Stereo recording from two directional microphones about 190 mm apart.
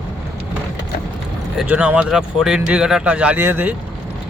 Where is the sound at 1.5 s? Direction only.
5° right (ahead or behind).